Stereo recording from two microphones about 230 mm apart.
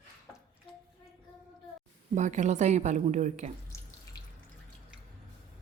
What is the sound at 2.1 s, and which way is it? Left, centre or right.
A woman's voice, right.